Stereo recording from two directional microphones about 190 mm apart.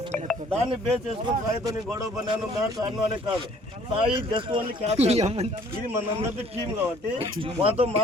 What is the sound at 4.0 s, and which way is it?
A man's voice, 25° right (ahead or behind).